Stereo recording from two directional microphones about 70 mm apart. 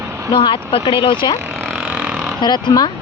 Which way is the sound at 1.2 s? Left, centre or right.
Left.